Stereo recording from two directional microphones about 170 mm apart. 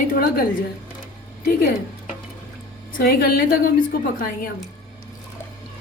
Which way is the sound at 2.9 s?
60° left (ahead or behind).